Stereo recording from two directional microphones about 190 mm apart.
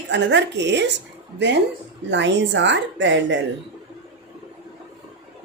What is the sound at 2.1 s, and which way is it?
A woman's voice, 70° right (ahead or behind).